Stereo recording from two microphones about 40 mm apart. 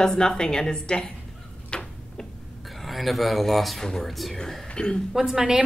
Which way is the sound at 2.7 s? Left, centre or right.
Centre.